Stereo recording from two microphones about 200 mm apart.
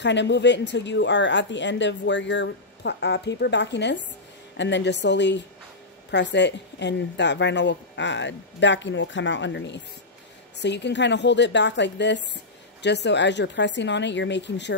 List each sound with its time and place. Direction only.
0.0 s a woman's voice: 60° left (ahead or behind)